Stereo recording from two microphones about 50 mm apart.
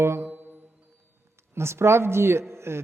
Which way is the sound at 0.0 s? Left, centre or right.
Right.